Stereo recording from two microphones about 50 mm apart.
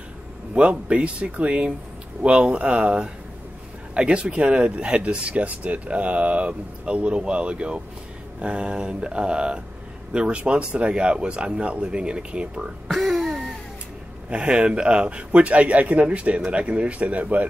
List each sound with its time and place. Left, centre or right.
0.6 s speech: right
12.8 s music: centre
14.3 s speech: right